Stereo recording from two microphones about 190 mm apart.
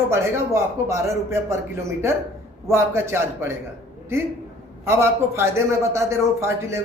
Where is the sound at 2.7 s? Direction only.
15° right (ahead or behind).